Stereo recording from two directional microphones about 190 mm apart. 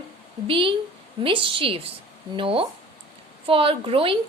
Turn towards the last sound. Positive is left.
turn(degrees=-30)  # may be behind; listen again after turning